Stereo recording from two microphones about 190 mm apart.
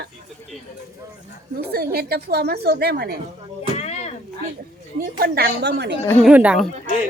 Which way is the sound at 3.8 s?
35° left (ahead or behind).